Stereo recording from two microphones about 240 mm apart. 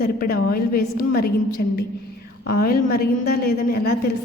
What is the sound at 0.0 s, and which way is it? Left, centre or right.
A woman's voice, left.